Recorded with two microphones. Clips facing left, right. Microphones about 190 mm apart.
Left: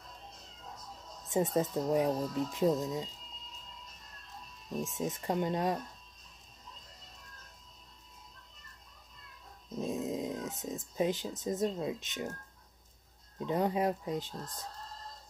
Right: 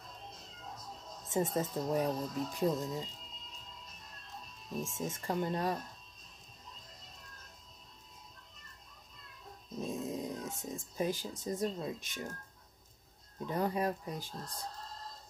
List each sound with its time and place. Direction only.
1.3 s speech: 20° left (ahead or behind)
4.8 s speech: 20° left (ahead or behind)
9.8 s speech: 20° left (ahead or behind)
13.5 s speech: 20° left (ahead or behind)